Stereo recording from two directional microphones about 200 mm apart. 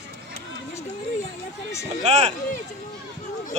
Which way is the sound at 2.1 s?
35° right (ahead or behind).